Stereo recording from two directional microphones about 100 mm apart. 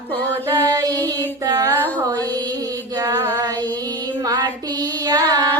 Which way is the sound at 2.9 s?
40° right (ahead or behind).